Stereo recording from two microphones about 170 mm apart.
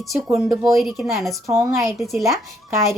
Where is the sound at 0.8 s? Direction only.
Centre (ahead or behind).